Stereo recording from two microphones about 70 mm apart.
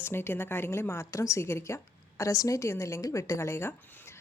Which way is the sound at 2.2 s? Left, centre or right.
Left.